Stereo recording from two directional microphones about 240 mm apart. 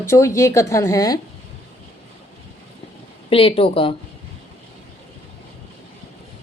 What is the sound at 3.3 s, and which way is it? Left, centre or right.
Speech, left.